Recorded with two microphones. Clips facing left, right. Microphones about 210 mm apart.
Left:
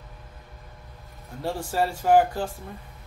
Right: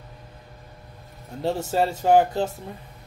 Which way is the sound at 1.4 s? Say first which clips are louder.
Right 3 dB; 25° right (ahead or behind).